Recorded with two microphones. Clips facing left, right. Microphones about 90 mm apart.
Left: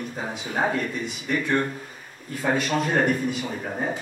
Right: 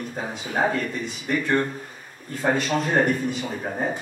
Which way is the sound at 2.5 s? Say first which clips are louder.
Even; centre (ahead or behind).